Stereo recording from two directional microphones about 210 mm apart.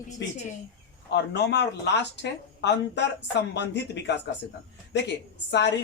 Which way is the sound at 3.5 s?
55° left (ahead or behind).